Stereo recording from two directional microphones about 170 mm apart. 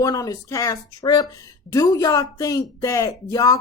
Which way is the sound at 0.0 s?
20° left (ahead or behind).